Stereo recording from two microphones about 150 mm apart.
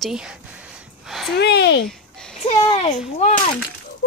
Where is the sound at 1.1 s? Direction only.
Centre (ahead or behind).